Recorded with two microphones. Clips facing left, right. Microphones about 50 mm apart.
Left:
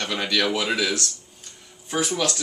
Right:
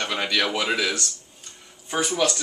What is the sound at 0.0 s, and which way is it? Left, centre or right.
Speech, centre.